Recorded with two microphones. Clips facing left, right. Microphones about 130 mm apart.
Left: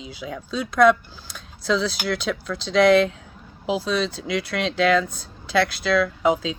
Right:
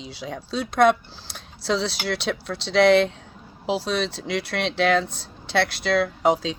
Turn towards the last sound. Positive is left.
turn(degrees=-30)  # may be behind; listen again after turning